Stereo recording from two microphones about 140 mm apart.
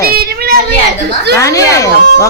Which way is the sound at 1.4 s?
20° left (ahead or behind).